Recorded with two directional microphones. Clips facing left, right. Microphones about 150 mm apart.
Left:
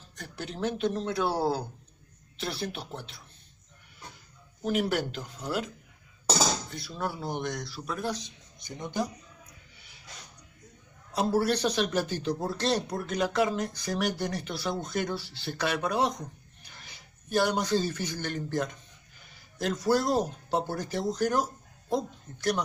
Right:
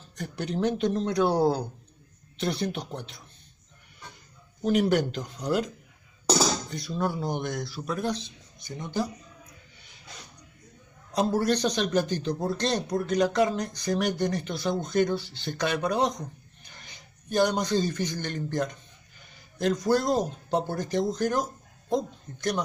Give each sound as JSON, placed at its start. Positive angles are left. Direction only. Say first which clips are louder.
{"t": 0.1, "sound": "speech", "louder": "right 7 dB", "side_deg": 0}
{"t": 4.6, "sound": "speech", "louder": "right 5 dB", "side_deg": 5}
{"t": 6.7, "sound": "speech", "louder": "right 5 dB", "side_deg": 5}
{"t": 8.2, "sound": "speech", "louder": "right 2 dB", "side_deg": 20}
{"t": 11.1, "sound": "a man's voice", "louder": "right 2 dB", "side_deg": 10}